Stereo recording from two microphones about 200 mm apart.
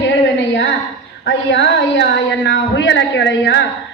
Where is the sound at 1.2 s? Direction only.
60° left (ahead or behind).